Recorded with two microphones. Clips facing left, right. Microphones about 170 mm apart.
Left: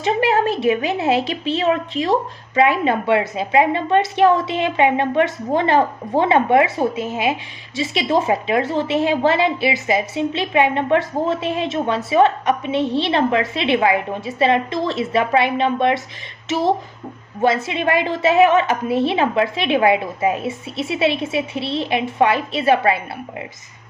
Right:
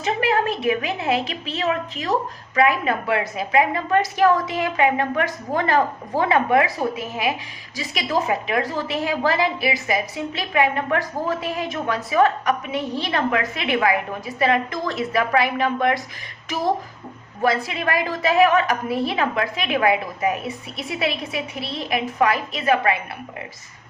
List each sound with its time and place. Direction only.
0.0 s a woman's voice: 30° left (ahead or behind)